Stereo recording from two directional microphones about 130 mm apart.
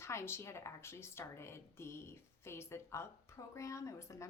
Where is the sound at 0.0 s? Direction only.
20° left (ahead or behind).